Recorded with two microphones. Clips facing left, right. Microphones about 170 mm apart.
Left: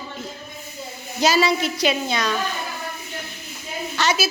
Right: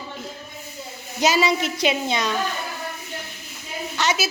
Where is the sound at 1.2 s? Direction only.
15° right (ahead or behind).